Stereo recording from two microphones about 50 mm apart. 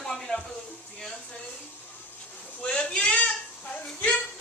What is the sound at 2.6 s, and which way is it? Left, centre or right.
A woman's voice, left.